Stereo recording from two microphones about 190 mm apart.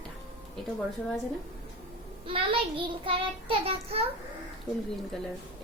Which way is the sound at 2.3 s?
30° right (ahead or behind).